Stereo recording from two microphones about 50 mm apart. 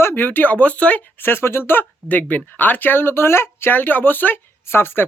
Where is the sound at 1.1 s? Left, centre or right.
Left.